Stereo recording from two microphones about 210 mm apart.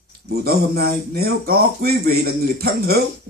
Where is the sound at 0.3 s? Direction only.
50° right (ahead or behind).